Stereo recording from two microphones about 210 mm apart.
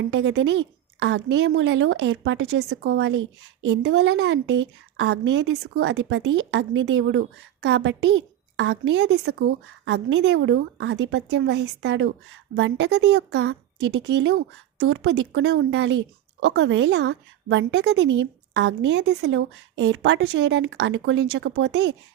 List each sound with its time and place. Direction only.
0.1 s a woman's voice: 60° right (ahead or behind)
16.4 s a woman's voice: 75° right (ahead or behind); by 21.9 s 55° right (ahead or behind)